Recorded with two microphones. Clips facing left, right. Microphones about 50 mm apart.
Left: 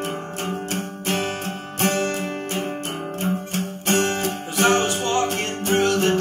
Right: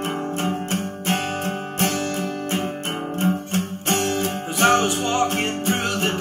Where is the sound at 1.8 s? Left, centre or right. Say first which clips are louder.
Left 4 dB; left.